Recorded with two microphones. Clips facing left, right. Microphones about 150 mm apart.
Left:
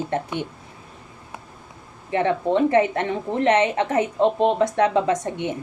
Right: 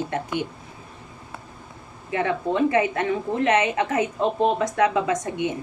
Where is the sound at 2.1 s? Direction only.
30° left (ahead or behind).